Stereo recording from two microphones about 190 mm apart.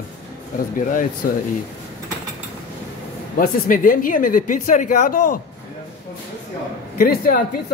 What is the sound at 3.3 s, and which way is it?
Speech, 45° left (ahead or behind).